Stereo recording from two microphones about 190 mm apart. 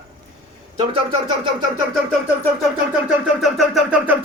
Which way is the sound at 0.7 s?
30° right (ahead or behind).